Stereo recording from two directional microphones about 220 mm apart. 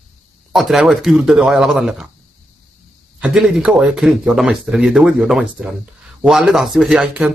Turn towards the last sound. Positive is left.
turn(degrees=0)  # may be behind; listen again after turning